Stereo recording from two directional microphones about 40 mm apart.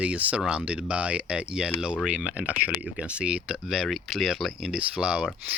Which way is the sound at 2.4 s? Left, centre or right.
Right.